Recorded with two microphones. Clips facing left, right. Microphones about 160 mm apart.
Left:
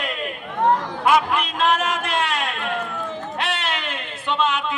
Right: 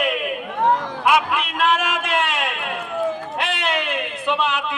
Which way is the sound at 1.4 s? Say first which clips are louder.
Even; 20° left (ahead or behind).